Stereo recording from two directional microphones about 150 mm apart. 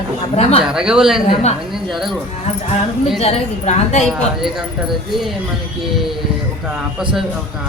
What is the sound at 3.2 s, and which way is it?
Speech, 45° left (ahead or behind).